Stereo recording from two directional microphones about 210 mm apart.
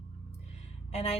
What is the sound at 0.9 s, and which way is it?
Speech, 30° left (ahead or behind).